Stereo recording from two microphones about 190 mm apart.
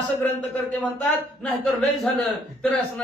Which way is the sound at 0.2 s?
10° left (ahead or behind).